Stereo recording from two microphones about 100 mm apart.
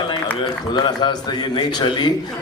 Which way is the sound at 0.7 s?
50° left (ahead or behind).